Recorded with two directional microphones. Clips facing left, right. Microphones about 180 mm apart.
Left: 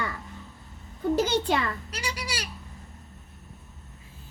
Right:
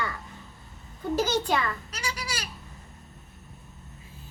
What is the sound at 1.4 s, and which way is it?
A child's voice, 30° left (ahead or behind).